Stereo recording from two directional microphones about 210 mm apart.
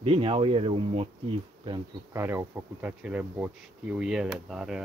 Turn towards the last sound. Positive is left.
turn(degrees=0)  # may be behind; listen again after turning